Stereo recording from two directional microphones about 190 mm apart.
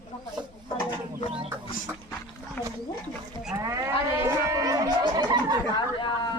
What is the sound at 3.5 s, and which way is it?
Cattle, 15° right (ahead or behind).